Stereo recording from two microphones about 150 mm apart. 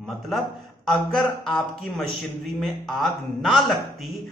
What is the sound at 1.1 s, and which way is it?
Speech, 5° left (ahead or behind).